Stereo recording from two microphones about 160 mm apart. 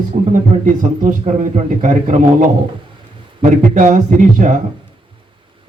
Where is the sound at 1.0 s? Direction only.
50° right (ahead or behind).